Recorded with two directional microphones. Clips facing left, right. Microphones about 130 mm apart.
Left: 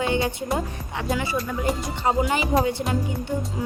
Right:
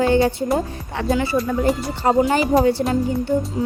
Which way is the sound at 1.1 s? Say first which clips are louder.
Right 6 dB; 30° right (ahead or behind).